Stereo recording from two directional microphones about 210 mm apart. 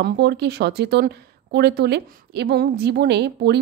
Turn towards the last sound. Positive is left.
turn(degrees=-50)  # may be behind; listen again after turning